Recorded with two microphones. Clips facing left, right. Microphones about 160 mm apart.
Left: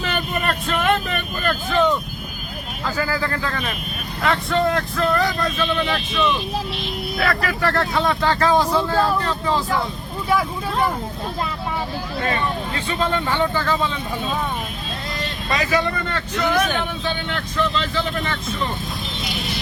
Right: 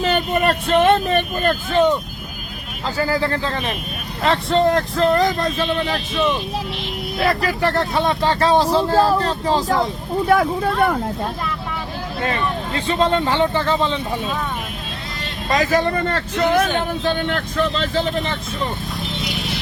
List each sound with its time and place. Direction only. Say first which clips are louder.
0.0 s speech: right 6 dB; 30° right (ahead or behind)
7.2 s speech: right 3 dB; 20° right (ahead or behind); by 9.8 s 35° right (ahead or behind)
10.2 s speech: right 4 dB; 55° right (ahead or behind)
12.3 s speech: right 1 dB; 30° right (ahead or behind)
15.4 s speech: right 4 dB; 45° right (ahead or behind)
16.4 s speech: right 3 dB; 30° right (ahead or behind)
17.0 s speech: right 5 dB; 45° right (ahead or behind)